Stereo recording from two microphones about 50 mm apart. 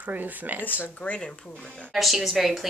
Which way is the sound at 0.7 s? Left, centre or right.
Left.